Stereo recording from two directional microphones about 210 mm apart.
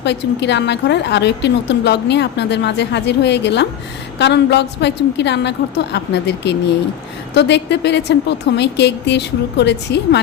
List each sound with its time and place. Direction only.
0.0 s a woman's voice: 55° left (ahead or behind)